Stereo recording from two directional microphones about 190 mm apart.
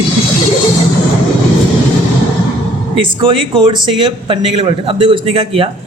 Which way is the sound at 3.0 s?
25° right (ahead or behind).